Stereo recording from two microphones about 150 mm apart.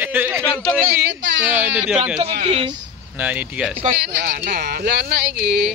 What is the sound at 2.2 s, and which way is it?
Speech, 45° right (ahead or behind).